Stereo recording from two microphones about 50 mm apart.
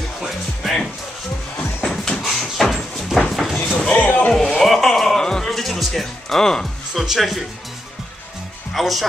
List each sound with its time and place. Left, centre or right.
0.2 s music: centre
1.6 s music: centre
2.2 s a sound: centre
3.9 s a sound: left
4.6 s music: centre
5.5 s music: centre
6.9 s speech: centre
8.7 s speech: centre